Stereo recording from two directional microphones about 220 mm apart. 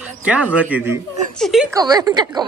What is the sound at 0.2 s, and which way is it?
A woman's voice, 5° right (ahead or behind).